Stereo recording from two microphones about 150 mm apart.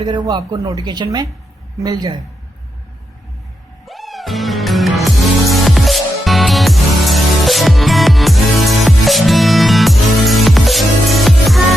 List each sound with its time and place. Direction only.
0.0 s speech: 25° right (ahead or behind)
3.8 s music: centre (ahead or behind)